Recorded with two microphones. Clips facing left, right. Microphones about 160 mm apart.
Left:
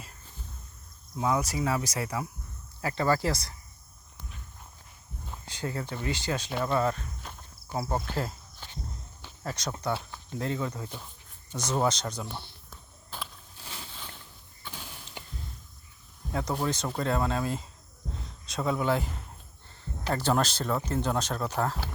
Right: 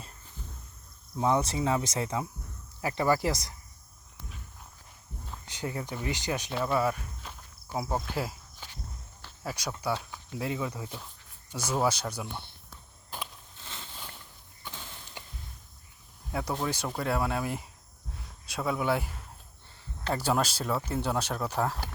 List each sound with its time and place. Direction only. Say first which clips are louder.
1.2 s speech: right 1 dB; 25° right (ahead or behind)
5.5 s speech: left 1 dB; 15° right (ahead or behind)
7.2 s walk: left 1 dB; centre (ahead or behind)
8.0 s insect: left 1 dB; 10° right (ahead or behind)
9.2 s cricket: left 1 dB; 5° right (ahead or behind)
10.3 s speech: left 1 dB; 10° right (ahead or behind)
13.1 s a sound: right 1 dB; 15° right (ahead or behind)
14.7 s a sound: left 1 dB; 10° left (ahead or behind)
16.3 s speech: left 2 dB; 10° right (ahead or behind)
20.1 s speech: left 2 dB; 10° right (ahead or behind)